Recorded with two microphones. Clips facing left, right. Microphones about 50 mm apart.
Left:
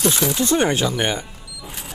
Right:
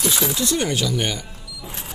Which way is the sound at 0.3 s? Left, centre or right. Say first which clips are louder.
Left 4 dB; left.